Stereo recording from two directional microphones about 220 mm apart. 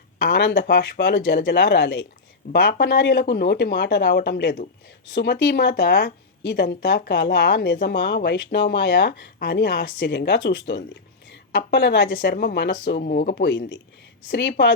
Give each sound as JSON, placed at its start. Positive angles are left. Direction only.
{"t": 0.3, "sound": "speech", "side_deg": 50}